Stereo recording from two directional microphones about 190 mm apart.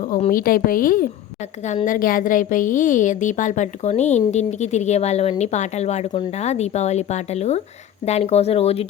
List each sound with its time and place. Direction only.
0.0 s a woman's voice: 45° left (ahead or behind)